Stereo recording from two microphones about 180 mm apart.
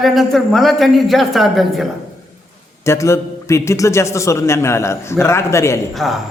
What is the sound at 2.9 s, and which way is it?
A man's voice, 15° left (ahead or behind).